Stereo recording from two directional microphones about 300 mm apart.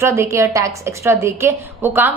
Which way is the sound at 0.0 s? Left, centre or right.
Centre.